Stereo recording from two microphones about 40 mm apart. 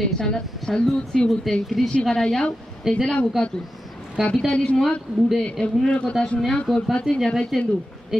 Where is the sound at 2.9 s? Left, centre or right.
Centre.